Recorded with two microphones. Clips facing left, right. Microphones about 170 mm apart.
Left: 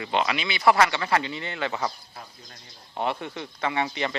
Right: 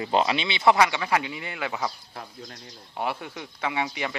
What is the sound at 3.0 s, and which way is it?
Speech, 5° right (ahead or behind).